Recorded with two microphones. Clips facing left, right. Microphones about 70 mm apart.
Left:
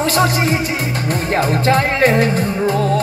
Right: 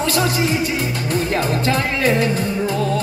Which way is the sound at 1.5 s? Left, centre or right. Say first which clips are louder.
Left 4 dB; left.